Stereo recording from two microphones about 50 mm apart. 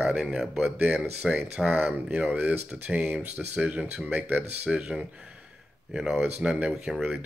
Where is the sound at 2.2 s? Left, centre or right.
Right.